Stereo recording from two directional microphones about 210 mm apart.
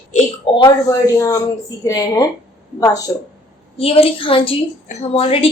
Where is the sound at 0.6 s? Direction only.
15° left (ahead or behind).